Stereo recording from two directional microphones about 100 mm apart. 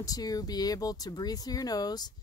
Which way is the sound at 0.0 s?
40° left (ahead or behind).